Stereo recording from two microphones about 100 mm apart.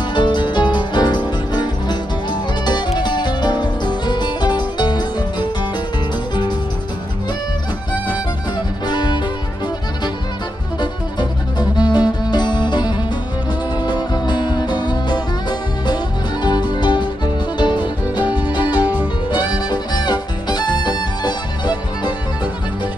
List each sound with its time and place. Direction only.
0.1 s music: 50° left (ahead or behind)
8.8 s music: 45° left (ahead or behind)
11.7 s music: 45° left (ahead or behind)
16.4 s music: 45° left (ahead or behind)
18.1 s music: 15° right (ahead or behind)
18.4 s music: 45° left (ahead or behind)